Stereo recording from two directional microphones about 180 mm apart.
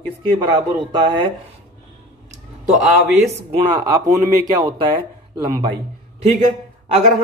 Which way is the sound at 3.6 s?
40° right (ahead or behind).